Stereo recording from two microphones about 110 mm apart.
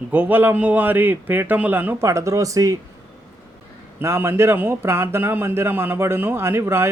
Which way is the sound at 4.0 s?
20° right (ahead or behind).